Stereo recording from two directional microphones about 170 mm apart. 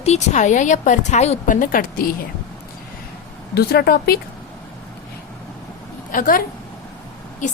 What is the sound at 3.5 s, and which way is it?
Speech, 65° left (ahead or behind).